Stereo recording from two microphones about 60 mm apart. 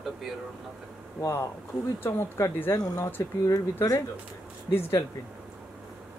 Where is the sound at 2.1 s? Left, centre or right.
Left.